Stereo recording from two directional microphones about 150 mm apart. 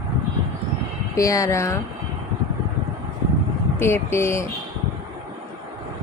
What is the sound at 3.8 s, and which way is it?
Speech, 15° left (ahead or behind).